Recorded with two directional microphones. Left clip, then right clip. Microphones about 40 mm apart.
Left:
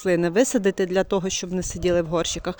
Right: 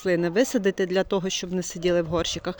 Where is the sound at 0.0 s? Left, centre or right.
Left.